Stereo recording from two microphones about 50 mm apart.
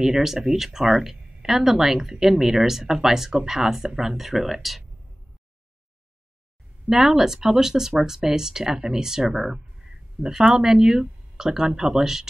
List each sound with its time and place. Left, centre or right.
0.0 s speech: centre
6.9 s speech: centre